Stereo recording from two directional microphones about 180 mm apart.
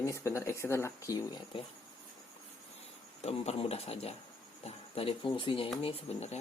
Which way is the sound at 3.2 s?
35° left (ahead or behind).